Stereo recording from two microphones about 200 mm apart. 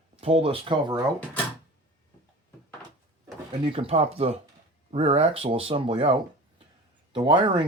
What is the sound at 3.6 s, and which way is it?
Speech, 25° right (ahead or behind).